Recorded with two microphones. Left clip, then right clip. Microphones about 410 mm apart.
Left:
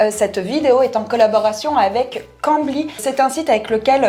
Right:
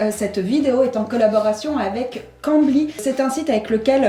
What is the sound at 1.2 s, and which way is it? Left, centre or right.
A woman's voice, left.